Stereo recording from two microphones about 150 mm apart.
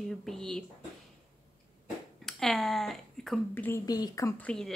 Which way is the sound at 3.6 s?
20° left (ahead or behind).